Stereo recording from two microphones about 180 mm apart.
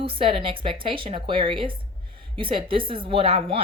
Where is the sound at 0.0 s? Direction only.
30° right (ahead or behind).